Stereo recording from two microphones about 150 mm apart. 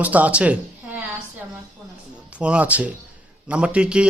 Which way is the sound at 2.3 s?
10° right (ahead or behind).